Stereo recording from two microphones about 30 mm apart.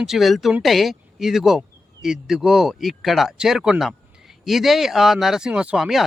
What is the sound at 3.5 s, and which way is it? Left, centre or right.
Speech, centre.